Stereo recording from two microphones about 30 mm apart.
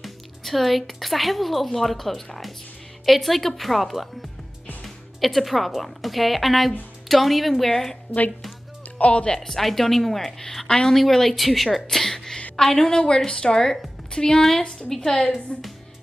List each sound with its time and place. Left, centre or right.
0.0 s speech: centre
7.7 s a woman's voice: centre
8.9 s speech: left
9.5 s a woman's voice: centre; by 14.4 s left
14.9 s a woman's voice: centre
15.5 s a woman's voice: left